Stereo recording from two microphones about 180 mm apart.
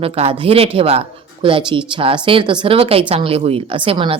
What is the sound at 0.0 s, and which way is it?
Speech, 30° right (ahead or behind).